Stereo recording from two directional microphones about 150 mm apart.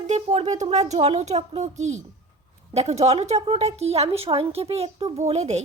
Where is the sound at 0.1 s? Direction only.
45° right (ahead or behind).